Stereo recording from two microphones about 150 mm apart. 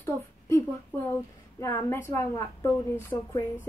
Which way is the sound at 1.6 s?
20° left (ahead or behind).